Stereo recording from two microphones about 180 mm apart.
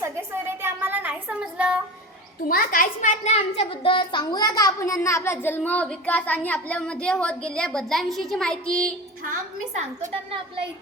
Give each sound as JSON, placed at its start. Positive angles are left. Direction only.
{"t": 0.0, "sound": "a sound", "side_deg": -15}
{"t": 2.5, "sound": "a child's voice", "side_deg": 50}
{"t": 9.7, "sound": "a woman's voice", "side_deg": -40}